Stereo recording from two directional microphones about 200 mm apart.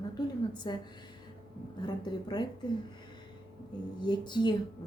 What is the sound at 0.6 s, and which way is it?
Speech, 25° left (ahead or behind).